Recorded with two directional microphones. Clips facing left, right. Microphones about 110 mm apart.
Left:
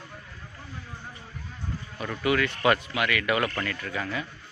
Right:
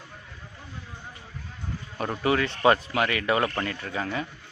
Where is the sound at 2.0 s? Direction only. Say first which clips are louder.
Right 1 dB; 35° right (ahead or behind).